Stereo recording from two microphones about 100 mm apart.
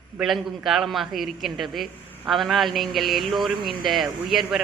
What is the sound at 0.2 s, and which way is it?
A man's voice, 5° right (ahead or behind).